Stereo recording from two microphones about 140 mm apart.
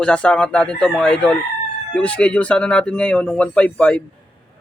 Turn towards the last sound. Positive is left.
turn(degrees=10)  # may be behind; listen again after turning